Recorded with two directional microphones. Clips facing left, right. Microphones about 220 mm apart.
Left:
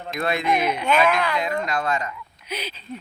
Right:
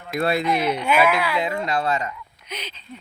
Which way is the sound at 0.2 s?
35° right (ahead or behind).